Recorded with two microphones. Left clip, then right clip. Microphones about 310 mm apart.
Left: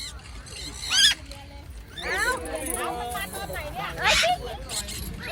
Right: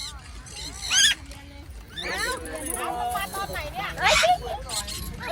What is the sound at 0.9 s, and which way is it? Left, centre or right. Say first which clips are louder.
Rodents: even; centre.